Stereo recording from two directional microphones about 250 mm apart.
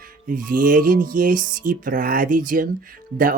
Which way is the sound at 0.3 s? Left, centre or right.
Right.